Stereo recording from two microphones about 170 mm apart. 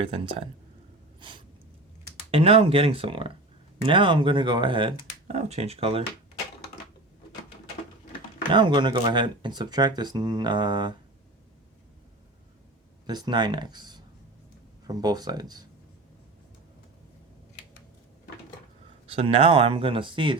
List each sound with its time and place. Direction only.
0.0 s speech: 35° right (ahead or behind)
8.5 s speech: 30° right (ahead or behind)
13.1 s speech: 25° right (ahead or behind)
19.0 s speech: 35° right (ahead or behind)